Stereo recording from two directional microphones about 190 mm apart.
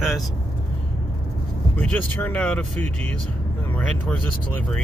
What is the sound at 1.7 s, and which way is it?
Speech, 5° left (ahead or behind).